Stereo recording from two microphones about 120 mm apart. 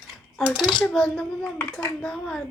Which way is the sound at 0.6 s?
5° left (ahead or behind).